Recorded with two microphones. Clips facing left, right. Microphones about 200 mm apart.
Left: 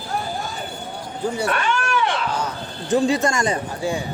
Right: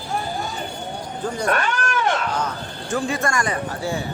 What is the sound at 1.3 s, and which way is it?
Speech, 10° left (ahead or behind).